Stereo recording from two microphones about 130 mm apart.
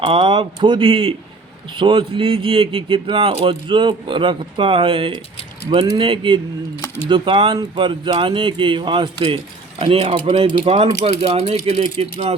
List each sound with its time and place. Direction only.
0.0 s speech: 40° right (ahead or behind)